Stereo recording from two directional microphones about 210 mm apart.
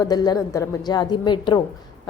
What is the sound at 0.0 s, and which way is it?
A woman's voice, 20° left (ahead or behind).